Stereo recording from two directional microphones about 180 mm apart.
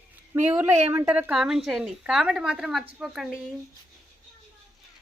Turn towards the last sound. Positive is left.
turn(degrees=-5)  # may be behind; listen again after turning